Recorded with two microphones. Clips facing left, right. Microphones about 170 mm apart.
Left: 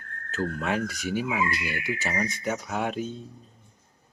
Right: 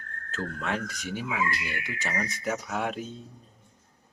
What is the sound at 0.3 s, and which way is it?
Speech, 10° left (ahead or behind).